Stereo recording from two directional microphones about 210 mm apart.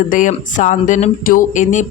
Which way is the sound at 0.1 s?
40° left (ahead or behind).